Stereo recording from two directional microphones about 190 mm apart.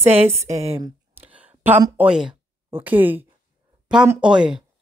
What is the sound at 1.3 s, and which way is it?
Speech, 10° right (ahead or behind).